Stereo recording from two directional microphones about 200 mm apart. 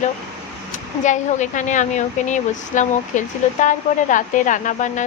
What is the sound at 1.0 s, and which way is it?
A woman's voice, 40° left (ahead or behind).